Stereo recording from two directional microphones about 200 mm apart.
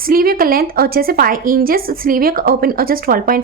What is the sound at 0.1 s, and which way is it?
A woman's voice, 45° right (ahead or behind).